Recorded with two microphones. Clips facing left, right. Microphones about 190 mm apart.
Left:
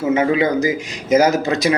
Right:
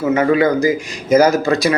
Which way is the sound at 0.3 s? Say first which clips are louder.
Right 3 dB; 20° left (ahead or behind).